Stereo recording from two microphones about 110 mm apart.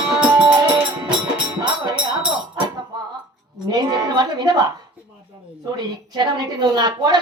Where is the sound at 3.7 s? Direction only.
40° right (ahead or behind).